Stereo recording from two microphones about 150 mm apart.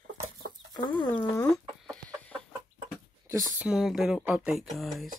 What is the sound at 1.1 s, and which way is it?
Speech, 20° left (ahead or behind).